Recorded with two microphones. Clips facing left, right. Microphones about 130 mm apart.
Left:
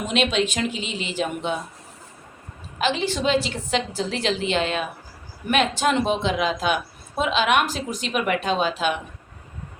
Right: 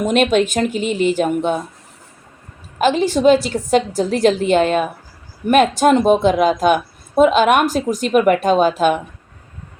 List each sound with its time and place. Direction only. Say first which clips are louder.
0.0 s a woman's voice: right 8 dB; 45° right (ahead or behind)
2.7 s a woman's voice: right 8 dB; 45° right (ahead or behind)